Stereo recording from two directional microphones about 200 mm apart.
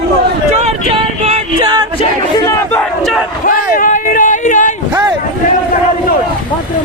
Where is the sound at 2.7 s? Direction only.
Centre (ahead or behind).